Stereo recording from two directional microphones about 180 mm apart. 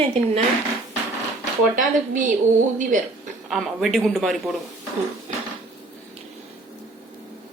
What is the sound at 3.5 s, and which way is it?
Speech, centre (ahead or behind).